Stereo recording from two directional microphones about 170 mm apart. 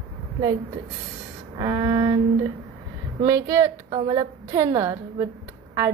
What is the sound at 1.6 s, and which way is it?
Speech, 25° right (ahead or behind).